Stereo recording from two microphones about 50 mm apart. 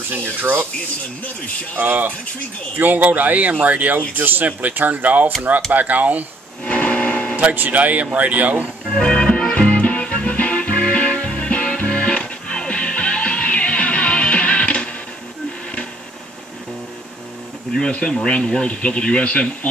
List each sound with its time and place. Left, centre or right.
0.1 s speech: right
1.8 s speech: right
6.6 s music: left
7.3 s speech: right
8.9 s music: centre
18.0 s speech: centre